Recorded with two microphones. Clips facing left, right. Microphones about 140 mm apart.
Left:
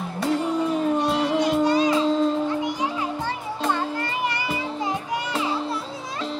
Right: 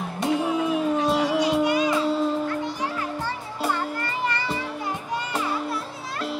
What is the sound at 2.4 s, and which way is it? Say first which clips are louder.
Children playing: left 3 dB; 15° left (ahead or behind).